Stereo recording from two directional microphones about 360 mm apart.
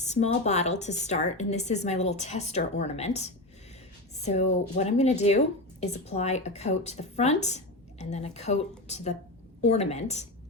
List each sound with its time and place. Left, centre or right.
0.0 s a woman's voice: centre